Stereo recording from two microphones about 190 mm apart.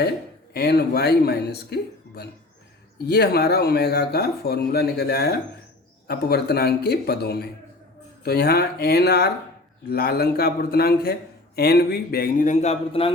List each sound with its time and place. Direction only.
0.5 s a man's voice: 55° left (ahead or behind); by 13.1 s 30° left (ahead or behind)